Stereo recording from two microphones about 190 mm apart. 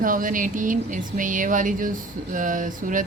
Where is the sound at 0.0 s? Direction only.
45° right (ahead or behind).